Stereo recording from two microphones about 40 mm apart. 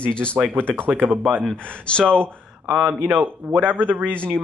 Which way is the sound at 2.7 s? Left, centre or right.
Right.